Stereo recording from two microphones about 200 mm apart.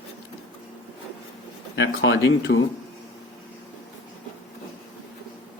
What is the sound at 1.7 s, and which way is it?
Speech, 65° left (ahead or behind).